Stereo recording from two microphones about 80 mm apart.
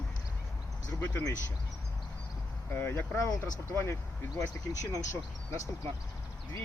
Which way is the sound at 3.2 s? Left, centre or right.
Left.